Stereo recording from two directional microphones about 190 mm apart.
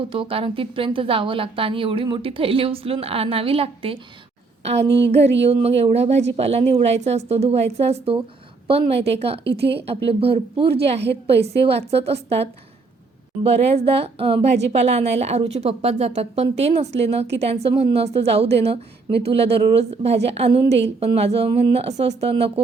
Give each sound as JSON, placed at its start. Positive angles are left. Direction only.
{"t": 0.1, "sound": "a woman's voice", "side_deg": -30}
{"t": 4.9, "sound": "a sound", "side_deg": -65}
{"t": 5.4, "sound": "a woman's voice", "side_deg": -35}
{"t": 9.4, "sound": "a woman's voice", "side_deg": -60}
{"t": 10.1, "sound": "speech", "side_deg": -30}
{"t": 11.0, "sound": "a woman's voice", "side_deg": -60}
{"t": 11.6, "sound": "a woman's voice", "side_deg": -30}
{"t": 19.1, "sound": "a woman's voice", "side_deg": -60}
{"t": 19.4, "sound": "a woman's voice", "side_deg": -30}
{"t": 20.7, "sound": "a sound", "side_deg": -65}
{"t": 21.0, "sound": "a woman's voice", "side_deg": -30}